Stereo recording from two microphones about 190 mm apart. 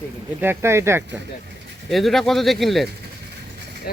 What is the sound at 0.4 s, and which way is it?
Speech, 15° right (ahead or behind).